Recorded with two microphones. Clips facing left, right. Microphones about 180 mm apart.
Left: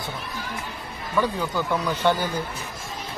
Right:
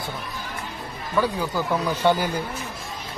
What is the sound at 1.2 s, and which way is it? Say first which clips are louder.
Speech: right 1 dB; 10° right (ahead or behind).